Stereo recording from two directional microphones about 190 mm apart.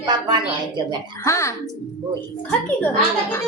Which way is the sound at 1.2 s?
15° left (ahead or behind).